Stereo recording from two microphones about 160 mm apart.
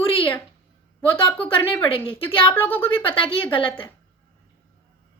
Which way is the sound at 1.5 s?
10° left (ahead or behind).